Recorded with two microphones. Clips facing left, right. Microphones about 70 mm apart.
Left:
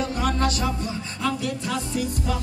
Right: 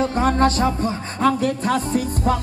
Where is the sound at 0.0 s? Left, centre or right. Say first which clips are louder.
Right 6 dB; right.